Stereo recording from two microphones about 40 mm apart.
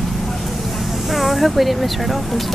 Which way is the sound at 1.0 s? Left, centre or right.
Centre.